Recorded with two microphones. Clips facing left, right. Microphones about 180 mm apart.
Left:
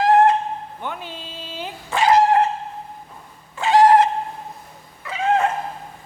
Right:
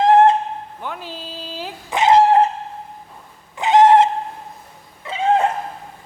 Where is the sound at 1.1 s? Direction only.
Centre (ahead or behind).